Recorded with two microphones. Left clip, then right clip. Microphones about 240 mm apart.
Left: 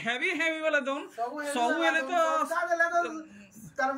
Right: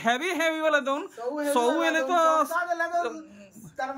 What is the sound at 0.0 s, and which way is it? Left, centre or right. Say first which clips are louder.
Speech: right 4 dB; centre.